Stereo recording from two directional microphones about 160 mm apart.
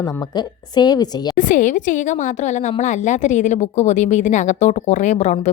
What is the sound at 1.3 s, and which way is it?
A woman's voice, 50° left (ahead or behind).